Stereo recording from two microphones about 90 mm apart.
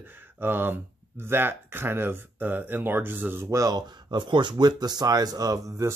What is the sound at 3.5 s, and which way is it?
Speech, 40° right (ahead or behind).